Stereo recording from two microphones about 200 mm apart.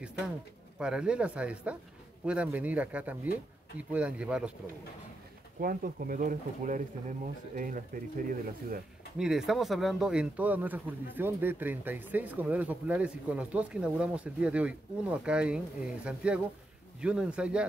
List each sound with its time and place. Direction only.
0.7 s speech: 5° right (ahead or behind)
5.6 s speech: 45° right (ahead or behind)
9.2 s speech: centre (ahead or behind)